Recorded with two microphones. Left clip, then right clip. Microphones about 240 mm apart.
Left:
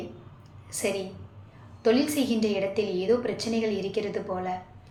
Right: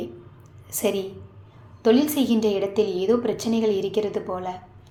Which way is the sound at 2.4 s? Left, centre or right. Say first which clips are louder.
Right 5 dB; right.